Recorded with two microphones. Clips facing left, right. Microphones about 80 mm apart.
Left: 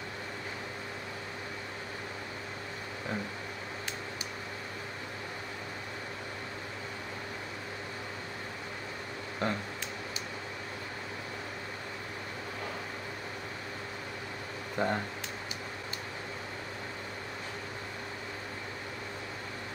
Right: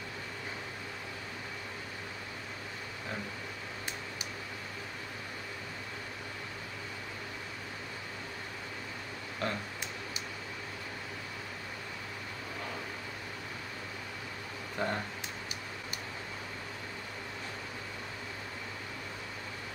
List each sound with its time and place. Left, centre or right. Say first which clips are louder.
9.4 s speech: left 3 dB; left
14.8 s speech: left 3 dB; left